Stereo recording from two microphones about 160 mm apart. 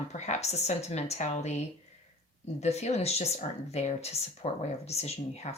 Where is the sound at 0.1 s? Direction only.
45° left (ahead or behind).